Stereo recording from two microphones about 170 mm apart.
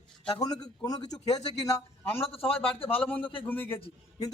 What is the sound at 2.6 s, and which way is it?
Speech, 35° left (ahead or behind).